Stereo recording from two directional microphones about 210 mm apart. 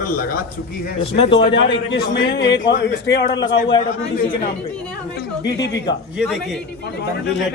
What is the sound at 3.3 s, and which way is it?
Speech, 20° left (ahead or behind).